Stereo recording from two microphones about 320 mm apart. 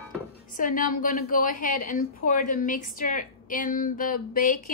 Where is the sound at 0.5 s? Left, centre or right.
Left.